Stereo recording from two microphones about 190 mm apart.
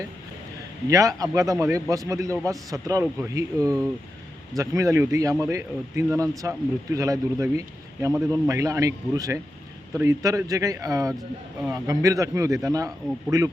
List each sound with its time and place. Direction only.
0.9 s a man's voice: 15° right (ahead or behind)